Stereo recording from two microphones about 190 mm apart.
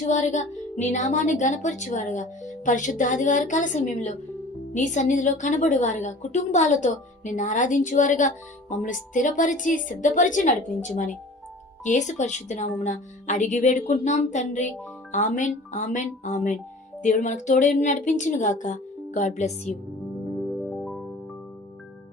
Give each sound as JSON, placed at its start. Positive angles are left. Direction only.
{"t": 0.1, "sound": "a woman's voice", "side_deg": 40}